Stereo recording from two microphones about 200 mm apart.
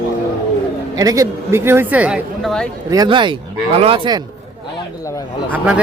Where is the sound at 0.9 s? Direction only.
15° right (ahead or behind); by 2.6 s centre (ahead or behind).